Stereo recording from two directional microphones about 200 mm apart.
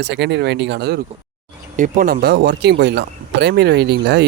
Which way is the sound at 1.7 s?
40° right (ahead or behind).